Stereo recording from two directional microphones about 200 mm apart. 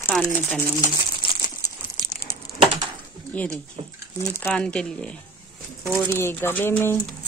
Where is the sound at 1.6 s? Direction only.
15° left (ahead or behind).